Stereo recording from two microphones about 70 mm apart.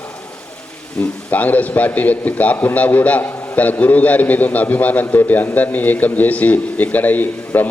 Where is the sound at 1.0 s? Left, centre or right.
Centre.